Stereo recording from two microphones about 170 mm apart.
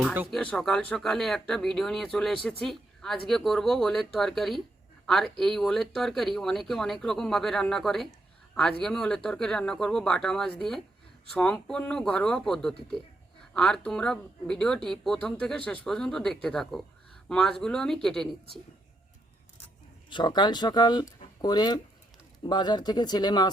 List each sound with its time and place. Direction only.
0.3 s speech: 5° left (ahead or behind)
20.1 s speech: 25° left (ahead or behind)